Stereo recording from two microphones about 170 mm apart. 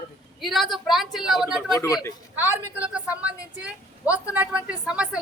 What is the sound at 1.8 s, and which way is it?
Speech, 15° left (ahead or behind).